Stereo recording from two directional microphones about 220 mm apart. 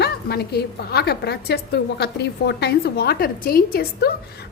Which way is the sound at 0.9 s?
45° left (ahead or behind).